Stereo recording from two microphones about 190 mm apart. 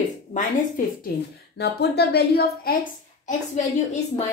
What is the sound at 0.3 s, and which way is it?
Speech, 40° left (ahead or behind).